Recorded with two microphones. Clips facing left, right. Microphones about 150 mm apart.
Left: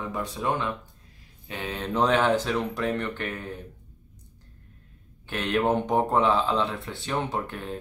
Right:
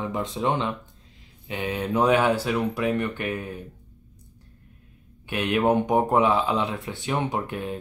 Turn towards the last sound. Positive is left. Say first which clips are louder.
# right 3 dB
turn(degrees=-15)  # may be behind; listen again after turning